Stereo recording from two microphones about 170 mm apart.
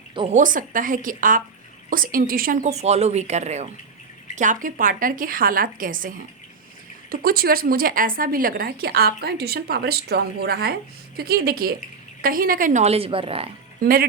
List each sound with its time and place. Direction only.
0.1 s a woman's voice: 30° right (ahead or behind)
0.3 s a woman's voice: 50° right (ahead or behind); by 13.5 s 35° right (ahead or behind)
13.7 s speech: 55° right (ahead or behind)